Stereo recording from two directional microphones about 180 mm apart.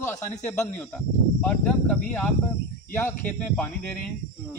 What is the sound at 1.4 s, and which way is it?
Speech, 10° left (ahead or behind).